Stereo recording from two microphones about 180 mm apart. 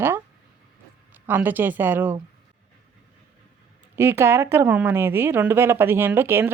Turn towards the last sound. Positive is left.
turn(degrees=-10)  # may be behind; listen again after turning